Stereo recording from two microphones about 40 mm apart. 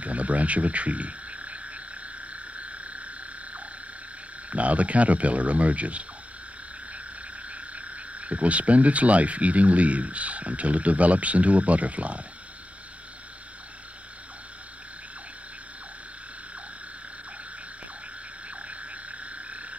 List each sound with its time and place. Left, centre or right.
0.0 s speech: right
2.3 s frog: right
4.5 s speech: right
7.4 s speech: right
18.6 s frog: right